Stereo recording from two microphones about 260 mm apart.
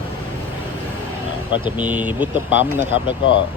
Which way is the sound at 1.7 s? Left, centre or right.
Centre.